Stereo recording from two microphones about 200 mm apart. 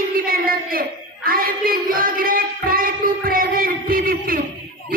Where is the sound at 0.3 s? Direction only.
45° right (ahead or behind).